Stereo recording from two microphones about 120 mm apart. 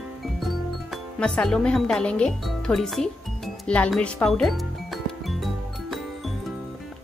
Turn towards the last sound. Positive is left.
turn(degrees=0)  # may be behind; listen again after turning